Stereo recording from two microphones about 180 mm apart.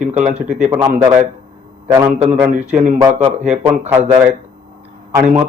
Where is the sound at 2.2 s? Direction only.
10° right (ahead or behind).